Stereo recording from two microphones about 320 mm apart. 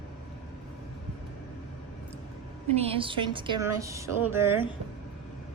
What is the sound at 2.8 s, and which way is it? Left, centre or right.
A woman's voice, centre.